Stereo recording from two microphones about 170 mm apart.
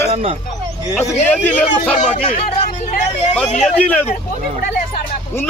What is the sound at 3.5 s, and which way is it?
Speech, 40° left (ahead or behind).